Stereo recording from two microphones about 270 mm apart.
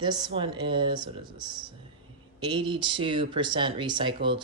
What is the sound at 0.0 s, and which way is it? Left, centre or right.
Speech, centre.